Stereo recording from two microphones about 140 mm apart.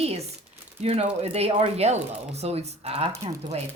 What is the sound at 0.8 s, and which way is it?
Speech, 50° right (ahead or behind).